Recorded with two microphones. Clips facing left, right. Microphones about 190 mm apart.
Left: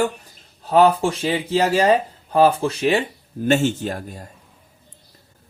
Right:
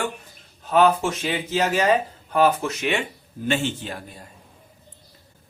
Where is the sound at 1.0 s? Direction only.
30° left (ahead or behind).